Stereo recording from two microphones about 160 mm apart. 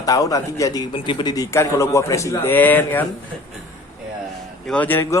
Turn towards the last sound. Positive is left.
turn(degrees=15)  # may be behind; listen again after turning